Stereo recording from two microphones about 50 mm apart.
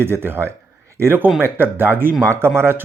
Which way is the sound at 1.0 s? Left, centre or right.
Right.